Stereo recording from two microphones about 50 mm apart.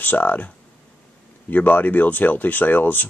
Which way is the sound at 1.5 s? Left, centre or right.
Left.